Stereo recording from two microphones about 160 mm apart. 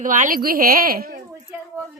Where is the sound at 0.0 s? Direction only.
55° right (ahead or behind).